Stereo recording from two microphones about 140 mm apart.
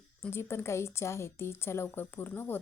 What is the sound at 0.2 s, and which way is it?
A woman's voice, 15° left (ahead or behind).